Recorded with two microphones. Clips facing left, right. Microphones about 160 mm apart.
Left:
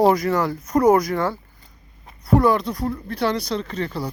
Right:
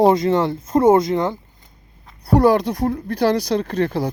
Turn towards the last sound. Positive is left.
turn(degrees=-50)  # may be behind; listen again after turning